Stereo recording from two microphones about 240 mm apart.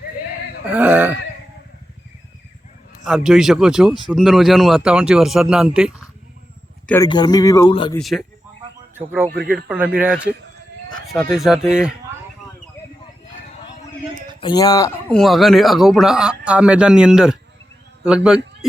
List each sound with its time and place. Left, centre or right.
0.6 s speech: centre
3.0 s speech: centre
6.8 s speech: centre
7.9 s speech: centre
9.3 s speech: right
9.6 s speech: centre
14.4 s speech: centre
15.1 s speech: centre